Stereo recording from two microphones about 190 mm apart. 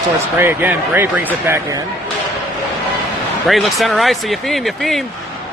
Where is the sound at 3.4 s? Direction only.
Centre (ahead or behind).